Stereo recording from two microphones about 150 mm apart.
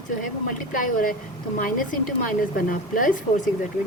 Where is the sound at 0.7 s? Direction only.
65° left (ahead or behind).